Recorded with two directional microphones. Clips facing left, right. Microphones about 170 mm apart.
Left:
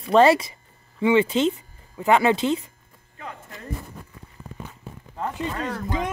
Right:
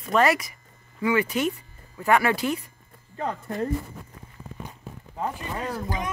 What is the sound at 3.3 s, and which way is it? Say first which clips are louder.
Speech: right 10 dB; 50° right (ahead or behind).